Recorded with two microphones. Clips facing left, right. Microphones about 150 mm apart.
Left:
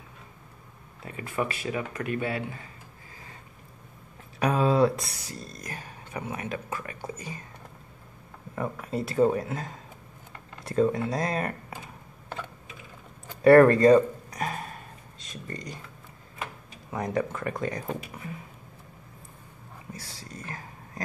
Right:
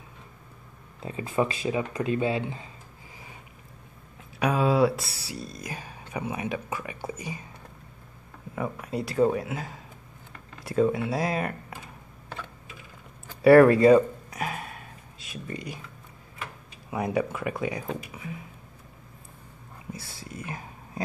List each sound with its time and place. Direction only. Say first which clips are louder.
1.0 s speech: right 4 dB; 25° right (ahead or behind)
4.4 s speech: even; centre (ahead or behind)
8.5 s speech: even; centre (ahead or behind)
13.4 s a sound: right 1 dB; 5° right (ahead or behind)
16.9 s speech: right 2 dB; 10° right (ahead or behind)
20.2 s a sound: right 3 dB; 10° right (ahead or behind)